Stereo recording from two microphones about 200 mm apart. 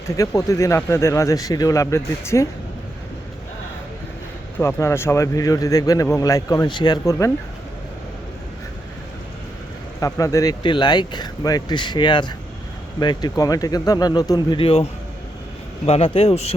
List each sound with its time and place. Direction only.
0.1 s speech: 15° left (ahead or behind)
4.5 s speech: 15° left (ahead or behind)
10.0 s speech: 15° left (ahead or behind)
15.9 s speech: 30° left (ahead or behind)